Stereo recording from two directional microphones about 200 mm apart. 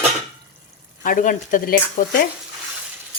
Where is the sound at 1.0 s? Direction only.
40° left (ahead or behind).